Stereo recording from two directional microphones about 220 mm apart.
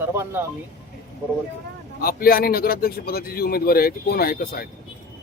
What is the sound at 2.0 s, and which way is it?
A man's voice, 40° left (ahead or behind).